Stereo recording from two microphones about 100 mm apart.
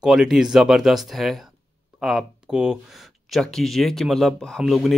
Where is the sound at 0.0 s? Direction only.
5° right (ahead or behind).